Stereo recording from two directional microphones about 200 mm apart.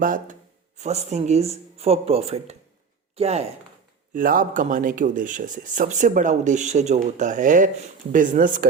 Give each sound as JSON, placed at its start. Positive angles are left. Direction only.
{"t": 0.0, "sound": "speech", "side_deg": -40}
{"t": 4.1, "sound": "speech", "side_deg": -45}